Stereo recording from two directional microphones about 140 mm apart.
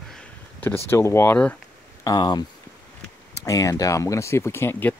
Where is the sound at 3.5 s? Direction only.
25° left (ahead or behind).